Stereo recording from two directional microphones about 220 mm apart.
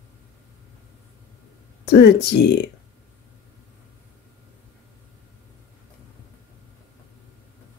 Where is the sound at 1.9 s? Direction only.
50° left (ahead or behind).